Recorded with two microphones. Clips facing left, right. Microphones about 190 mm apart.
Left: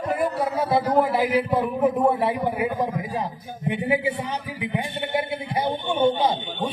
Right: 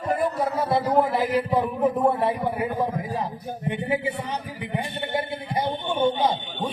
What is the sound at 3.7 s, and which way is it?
Speech, 10° left (ahead or behind).